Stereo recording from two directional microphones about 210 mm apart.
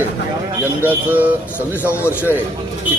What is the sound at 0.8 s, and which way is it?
Speech, 10° right (ahead or behind).